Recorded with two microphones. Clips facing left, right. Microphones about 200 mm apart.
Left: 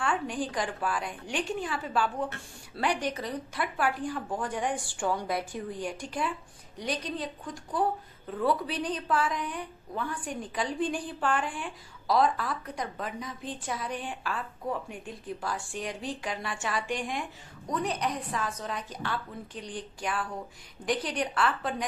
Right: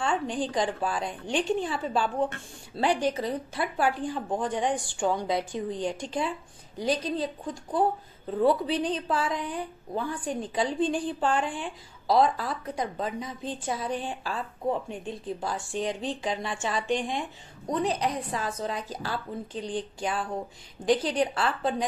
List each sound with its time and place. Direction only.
0.0 s a woman's voice: 25° right (ahead or behind)